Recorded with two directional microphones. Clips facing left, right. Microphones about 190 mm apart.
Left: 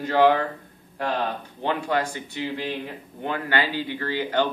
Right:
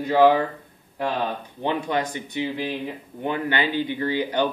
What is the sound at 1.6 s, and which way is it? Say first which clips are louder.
Speech: even; 20° right (ahead or behind).